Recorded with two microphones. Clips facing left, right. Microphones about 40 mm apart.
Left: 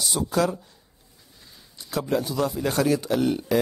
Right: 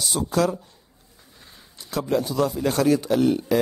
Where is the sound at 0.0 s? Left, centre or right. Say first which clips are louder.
Right 1 dB; centre.